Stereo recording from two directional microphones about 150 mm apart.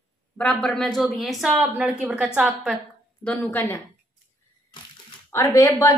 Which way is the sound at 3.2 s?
10° left (ahead or behind).